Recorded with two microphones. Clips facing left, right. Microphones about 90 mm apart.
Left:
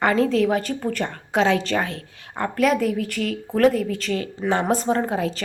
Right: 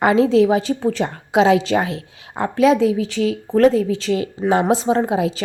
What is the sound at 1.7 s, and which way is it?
Speech, 30° right (ahead or behind).